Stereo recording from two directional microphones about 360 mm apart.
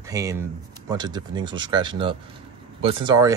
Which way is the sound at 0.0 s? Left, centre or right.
Centre.